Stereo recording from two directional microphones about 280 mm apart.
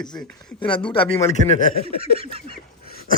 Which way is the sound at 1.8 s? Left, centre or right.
Centre.